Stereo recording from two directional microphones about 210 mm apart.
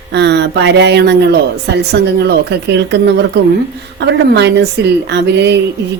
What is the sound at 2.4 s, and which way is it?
Speech, 55° right (ahead or behind).